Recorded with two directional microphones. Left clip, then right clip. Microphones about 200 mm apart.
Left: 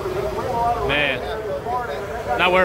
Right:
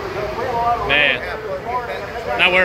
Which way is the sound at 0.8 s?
5° left (ahead or behind).